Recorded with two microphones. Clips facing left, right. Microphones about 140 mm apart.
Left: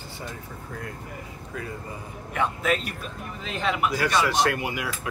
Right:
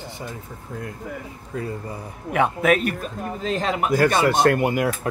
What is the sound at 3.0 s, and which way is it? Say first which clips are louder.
A man's voice: right 8 dB; 40° right (ahead or behind).